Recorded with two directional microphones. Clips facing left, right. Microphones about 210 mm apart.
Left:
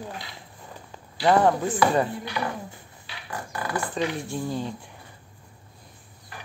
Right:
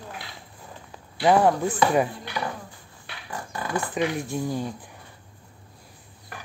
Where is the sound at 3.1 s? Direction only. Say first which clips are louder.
Even; 55° right (ahead or behind).